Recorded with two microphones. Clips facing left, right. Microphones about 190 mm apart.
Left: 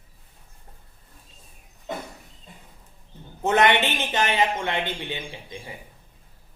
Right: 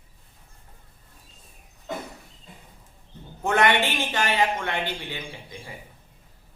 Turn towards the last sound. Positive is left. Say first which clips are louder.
# left 2 dB
turn(degrees=20)  # may be behind; listen again after turning